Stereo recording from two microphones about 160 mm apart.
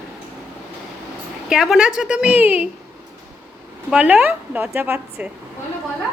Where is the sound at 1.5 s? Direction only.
5° right (ahead or behind).